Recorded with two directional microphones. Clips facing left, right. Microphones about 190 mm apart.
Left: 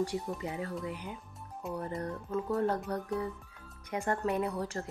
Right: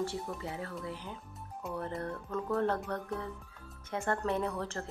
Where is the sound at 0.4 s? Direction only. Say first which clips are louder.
Left 3 dB; 15° left (ahead or behind).